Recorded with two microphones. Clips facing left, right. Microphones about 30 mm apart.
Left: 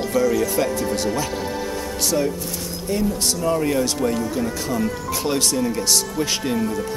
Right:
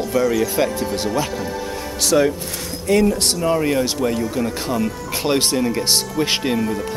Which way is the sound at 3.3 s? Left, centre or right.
Right.